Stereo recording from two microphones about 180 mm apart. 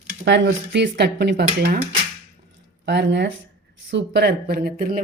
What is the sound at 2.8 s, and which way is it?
Speech, 75° right (ahead or behind).